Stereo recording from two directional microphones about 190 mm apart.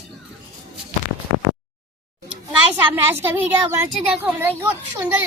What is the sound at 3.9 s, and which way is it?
Speech, 5° right (ahead or behind).